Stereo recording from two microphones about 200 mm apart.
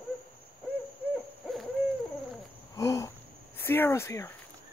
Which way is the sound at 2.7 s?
15° left (ahead or behind).